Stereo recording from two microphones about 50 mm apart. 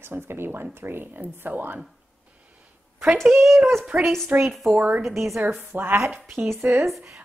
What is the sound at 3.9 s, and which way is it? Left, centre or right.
Speech, right.